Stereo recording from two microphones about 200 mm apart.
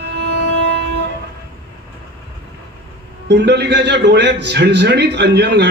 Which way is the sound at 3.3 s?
60° right (ahead or behind).